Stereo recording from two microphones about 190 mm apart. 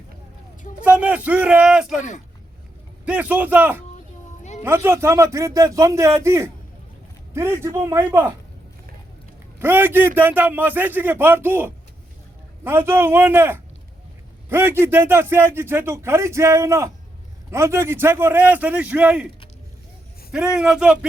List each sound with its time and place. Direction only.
0.9 s speech: 5° right (ahead or behind)
3.1 s speech: 10° right (ahead or behind)
9.6 s speech: 10° right (ahead or behind)
20.3 s speech: 5° right (ahead or behind)